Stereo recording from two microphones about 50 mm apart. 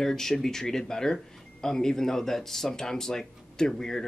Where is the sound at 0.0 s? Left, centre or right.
Centre.